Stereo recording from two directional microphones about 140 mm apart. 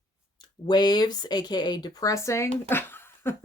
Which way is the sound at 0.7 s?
30° left (ahead or behind).